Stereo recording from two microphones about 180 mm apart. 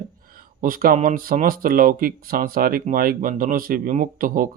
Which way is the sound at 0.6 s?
50° right (ahead or behind).